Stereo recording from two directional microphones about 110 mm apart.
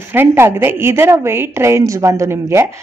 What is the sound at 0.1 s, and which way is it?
A woman's voice, 20° right (ahead or behind).